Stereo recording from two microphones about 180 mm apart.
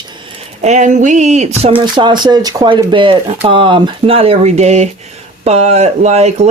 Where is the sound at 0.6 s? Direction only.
40° right (ahead or behind).